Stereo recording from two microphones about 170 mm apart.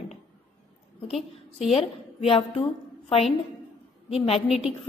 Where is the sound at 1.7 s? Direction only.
35° left (ahead or behind).